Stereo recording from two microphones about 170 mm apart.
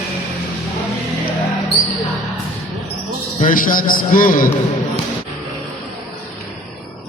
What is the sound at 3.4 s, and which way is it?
A man's voice, 55° left (ahead or behind).